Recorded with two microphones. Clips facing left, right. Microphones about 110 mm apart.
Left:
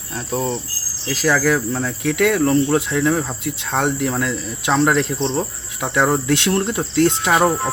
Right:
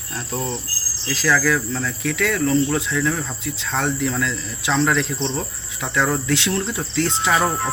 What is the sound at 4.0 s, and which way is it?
Speech, 50° left (ahead or behind).